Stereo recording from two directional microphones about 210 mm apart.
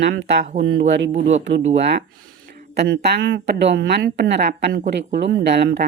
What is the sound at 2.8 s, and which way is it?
A woman's voice, 55° right (ahead or behind).